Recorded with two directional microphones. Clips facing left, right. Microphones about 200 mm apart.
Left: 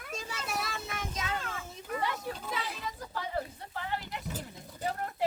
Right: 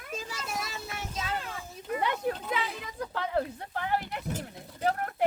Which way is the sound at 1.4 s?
10° right (ahead or behind).